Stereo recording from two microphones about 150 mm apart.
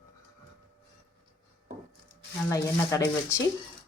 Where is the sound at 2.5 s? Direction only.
20° left (ahead or behind).